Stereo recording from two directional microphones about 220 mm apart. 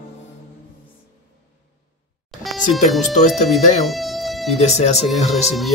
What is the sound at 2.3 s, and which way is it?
Music, centre (ahead or behind).